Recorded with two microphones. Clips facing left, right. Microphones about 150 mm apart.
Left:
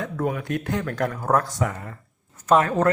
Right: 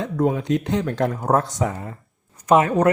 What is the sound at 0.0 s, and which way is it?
Speech, 20° right (ahead or behind).